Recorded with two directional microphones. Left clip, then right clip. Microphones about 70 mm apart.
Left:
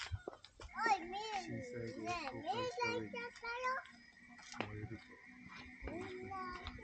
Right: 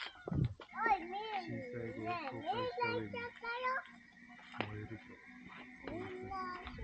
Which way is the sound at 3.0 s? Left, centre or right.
Left.